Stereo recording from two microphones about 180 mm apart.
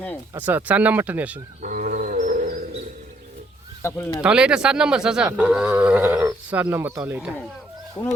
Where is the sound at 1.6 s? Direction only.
45° right (ahead or behind).